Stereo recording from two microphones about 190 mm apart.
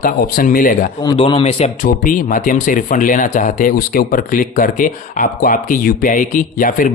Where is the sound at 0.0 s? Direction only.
50° left (ahead or behind).